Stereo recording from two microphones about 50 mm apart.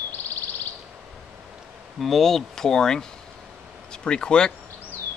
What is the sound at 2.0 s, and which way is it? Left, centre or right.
Speech, centre.